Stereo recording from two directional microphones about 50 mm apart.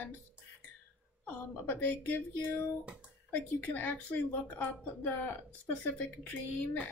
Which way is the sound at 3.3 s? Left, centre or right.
Left.